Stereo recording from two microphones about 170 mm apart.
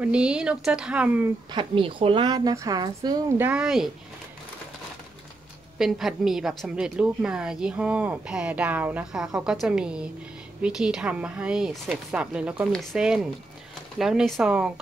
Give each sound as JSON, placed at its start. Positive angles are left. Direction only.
{"t": 0.0, "sound": "a woman's voice", "side_deg": -5}
{"t": 1.5, "sound": "speech", "side_deg": -30}
{"t": 3.3, "sound": "a woman's voice", "side_deg": -10}
{"t": 5.8, "sound": "a woman's voice", "side_deg": 0}